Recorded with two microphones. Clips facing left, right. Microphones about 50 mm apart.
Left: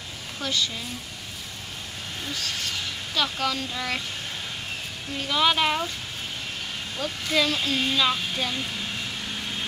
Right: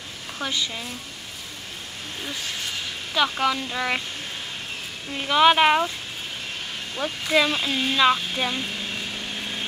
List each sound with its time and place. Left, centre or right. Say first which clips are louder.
0.4 s a woman's voice: even; centre
3.2 s speech: right 4 dB; right
5.3 s speech: right 6 dB; right
7.2 s speech: right 3 dB; right